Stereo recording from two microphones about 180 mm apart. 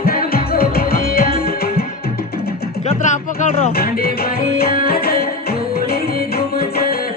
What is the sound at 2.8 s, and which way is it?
Music, 40° left (ahead or behind).